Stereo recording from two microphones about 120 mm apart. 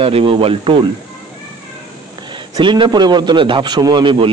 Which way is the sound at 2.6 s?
45° right (ahead or behind).